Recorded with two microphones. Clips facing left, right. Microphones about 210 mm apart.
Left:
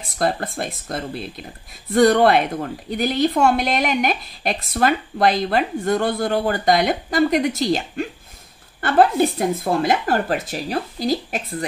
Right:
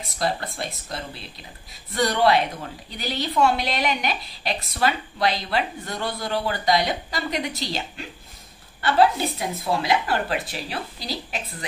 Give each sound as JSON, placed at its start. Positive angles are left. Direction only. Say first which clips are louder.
{"t": 0.2, "sound": "a woman's voice", "louder": "left 5 dB", "side_deg": 50}